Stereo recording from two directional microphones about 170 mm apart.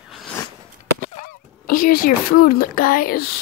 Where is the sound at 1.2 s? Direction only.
55° left (ahead or behind).